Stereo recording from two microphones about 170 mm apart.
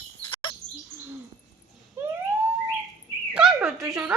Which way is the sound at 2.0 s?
15° right (ahead or behind).